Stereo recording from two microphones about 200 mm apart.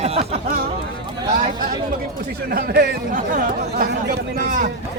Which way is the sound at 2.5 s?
50° right (ahead or behind).